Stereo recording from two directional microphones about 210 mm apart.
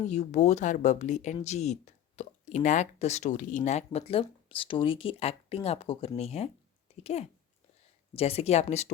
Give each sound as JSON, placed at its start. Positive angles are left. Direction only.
{"t": 0.1, "sound": "speech", "side_deg": 35}